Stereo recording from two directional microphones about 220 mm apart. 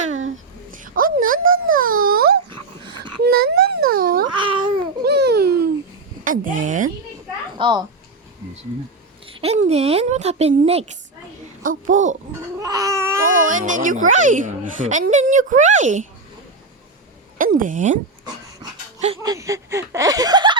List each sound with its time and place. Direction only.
0.7 s a sound: 40° right (ahead or behind)
4.4 s babbling: 20° right (ahead or behind)
5.0 s babbling: 45° right (ahead or behind)
6.2 s a child's voice: 40° right (ahead or behind)
7.6 s a woman's voice: 20° right (ahead or behind)
9.2 s a woman's voice: 25° right (ahead or behind)
12.5 s babbling: 15° right (ahead or behind)
13.3 s a child's voice: 35° right (ahead or behind)
17.3 s a child's voice: 40° right (ahead or behind)
19.2 s speech: 15° right (ahead or behind)